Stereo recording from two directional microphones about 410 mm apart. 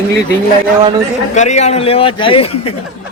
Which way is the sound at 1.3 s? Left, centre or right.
Centre.